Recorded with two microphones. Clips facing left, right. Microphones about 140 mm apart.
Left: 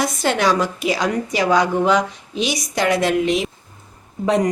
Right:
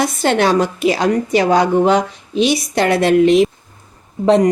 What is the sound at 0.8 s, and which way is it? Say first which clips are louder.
Speech: right 5 dB; 55° right (ahead or behind).